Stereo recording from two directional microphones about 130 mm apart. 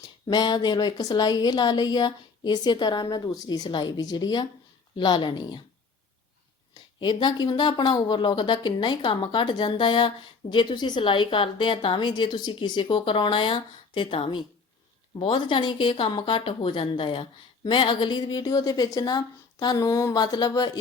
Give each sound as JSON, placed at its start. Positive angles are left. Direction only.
{"t": 0.3, "sound": "a woman's voice", "side_deg": 35}
{"t": 7.0, "sound": "a woman's voice", "side_deg": 35}